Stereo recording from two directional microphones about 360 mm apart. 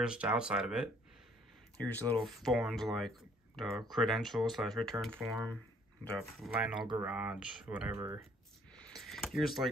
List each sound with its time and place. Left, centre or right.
0.0 s speech: centre
6.4 s speech: centre
8.8 s a sound: centre